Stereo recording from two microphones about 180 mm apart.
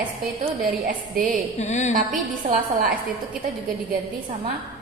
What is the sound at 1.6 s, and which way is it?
Speech, 40° left (ahead or behind).